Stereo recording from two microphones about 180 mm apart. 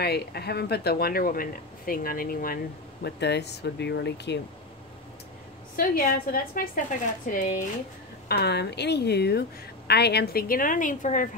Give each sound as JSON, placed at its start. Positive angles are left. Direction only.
{"t": 0.0, "sound": "speech", "side_deg": 65}
{"t": 5.8, "sound": "a woman's voice", "side_deg": 50}
{"t": 8.3, "sound": "a woman's voice", "side_deg": 65}